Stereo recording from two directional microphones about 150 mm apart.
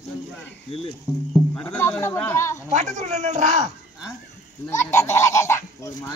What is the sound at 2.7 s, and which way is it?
Speech, 50° right (ahead or behind).